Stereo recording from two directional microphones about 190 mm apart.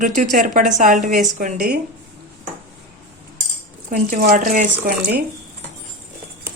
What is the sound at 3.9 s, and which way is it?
A woman's voice, 45° right (ahead or behind).